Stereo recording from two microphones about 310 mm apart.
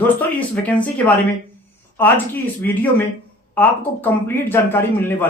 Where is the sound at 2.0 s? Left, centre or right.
Centre.